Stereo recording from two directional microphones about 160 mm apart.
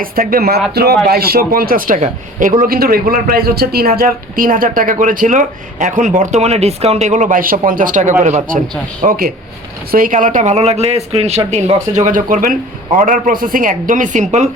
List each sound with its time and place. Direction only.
0.0 s speech: 65° right (ahead or behind)
9.0 s speech: 65° right (ahead or behind); by 14.5 s 45° right (ahead or behind)